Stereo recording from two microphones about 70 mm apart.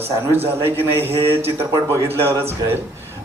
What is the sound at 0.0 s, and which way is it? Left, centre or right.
A man's voice, right.